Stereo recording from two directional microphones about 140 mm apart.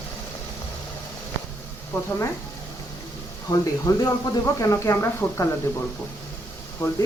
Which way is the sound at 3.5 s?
25° left (ahead or behind).